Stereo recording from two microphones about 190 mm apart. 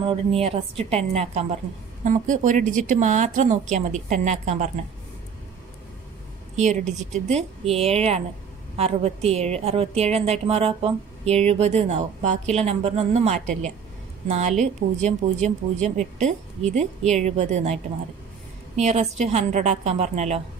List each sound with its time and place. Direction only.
0.0 s a woman's voice: 30° right (ahead or behind)
6.5 s a woman's voice: 40° right (ahead or behind)
18.8 s a woman's voice: 35° right (ahead or behind)